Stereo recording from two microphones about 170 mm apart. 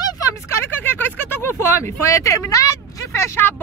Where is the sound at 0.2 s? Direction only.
15° left (ahead or behind).